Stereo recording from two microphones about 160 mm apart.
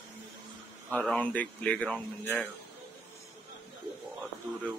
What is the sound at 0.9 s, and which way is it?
Speech, 10° left (ahead or behind).